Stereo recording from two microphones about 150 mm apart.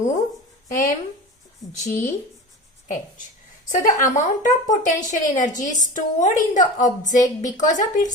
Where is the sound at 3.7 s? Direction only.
60° left (ahead or behind).